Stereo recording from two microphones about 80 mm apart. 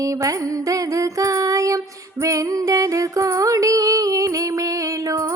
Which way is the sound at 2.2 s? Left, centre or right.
Right.